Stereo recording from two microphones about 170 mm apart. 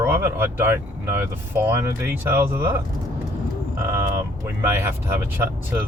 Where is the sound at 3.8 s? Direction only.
15° right (ahead or behind).